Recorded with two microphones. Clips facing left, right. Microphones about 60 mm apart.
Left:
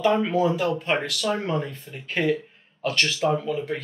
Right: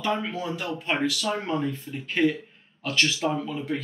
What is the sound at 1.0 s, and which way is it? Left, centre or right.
Speech, centre.